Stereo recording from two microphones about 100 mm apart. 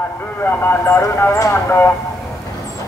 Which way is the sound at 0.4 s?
20° left (ahead or behind).